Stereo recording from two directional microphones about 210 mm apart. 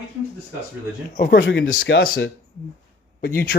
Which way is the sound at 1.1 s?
45° left (ahead or behind).